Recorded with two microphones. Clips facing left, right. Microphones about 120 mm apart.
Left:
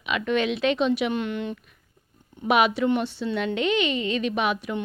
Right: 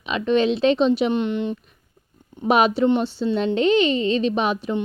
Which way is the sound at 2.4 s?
35° right (ahead or behind).